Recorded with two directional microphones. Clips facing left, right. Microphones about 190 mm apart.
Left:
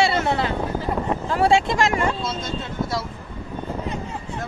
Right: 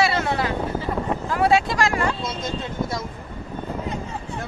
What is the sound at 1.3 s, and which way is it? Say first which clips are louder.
Speech: left 1 dB; 25° left (ahead or behind).